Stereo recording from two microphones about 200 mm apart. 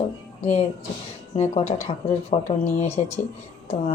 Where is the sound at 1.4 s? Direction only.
35° left (ahead or behind).